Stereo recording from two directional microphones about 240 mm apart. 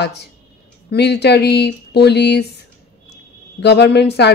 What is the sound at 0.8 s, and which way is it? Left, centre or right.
A woman's voice, left.